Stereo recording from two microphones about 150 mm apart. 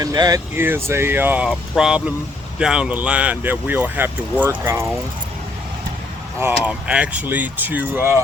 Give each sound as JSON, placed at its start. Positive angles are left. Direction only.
{"t": 0.0, "sound": "speech", "side_deg": -25}
{"t": 6.4, "sound": "speech", "side_deg": -10}